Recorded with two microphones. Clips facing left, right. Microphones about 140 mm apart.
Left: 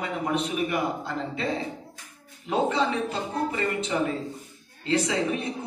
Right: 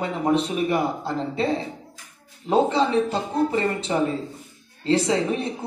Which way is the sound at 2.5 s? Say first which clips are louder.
Right 5 dB; 30° right (ahead or behind).